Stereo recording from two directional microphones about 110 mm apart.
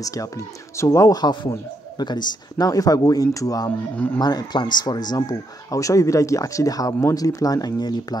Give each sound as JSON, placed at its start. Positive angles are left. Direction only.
{"t": 0.0, "sound": "speech", "side_deg": 30}